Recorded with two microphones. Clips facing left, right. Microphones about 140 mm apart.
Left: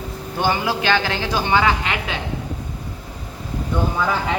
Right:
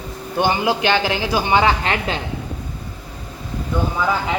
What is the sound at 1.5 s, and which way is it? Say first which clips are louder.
Speech: right 2 dB; 35° right (ahead or behind).